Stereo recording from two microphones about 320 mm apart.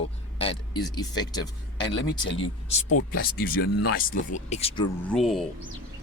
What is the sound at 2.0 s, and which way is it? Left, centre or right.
Speech, left.